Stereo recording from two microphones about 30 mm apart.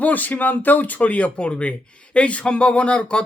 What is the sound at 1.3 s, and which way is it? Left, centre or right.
Speech, left.